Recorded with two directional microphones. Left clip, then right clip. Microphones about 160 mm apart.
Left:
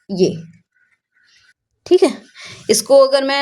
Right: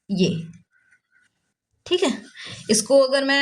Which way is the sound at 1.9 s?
25° left (ahead or behind).